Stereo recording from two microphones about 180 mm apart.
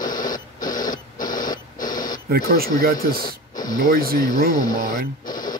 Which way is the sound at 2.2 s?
55° right (ahead or behind).